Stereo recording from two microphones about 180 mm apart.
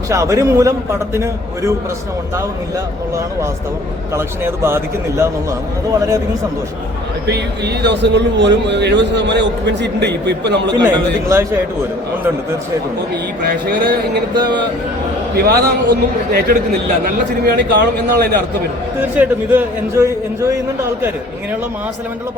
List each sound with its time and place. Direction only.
0.1 s a man's voice: 15° right (ahead or behind)
4.1 s a man's voice: 15° right (ahead or behind)
7.3 s a man's voice: 65° right (ahead or behind)
10.8 s a man's voice: 15° right (ahead or behind)
13.4 s a man's voice: 60° right (ahead or behind)
15.4 s a man's voice: 60° right (ahead or behind)
18.9 s a man's voice: 10° right (ahead or behind)